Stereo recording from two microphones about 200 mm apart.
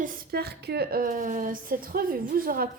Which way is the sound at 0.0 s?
45° right (ahead or behind).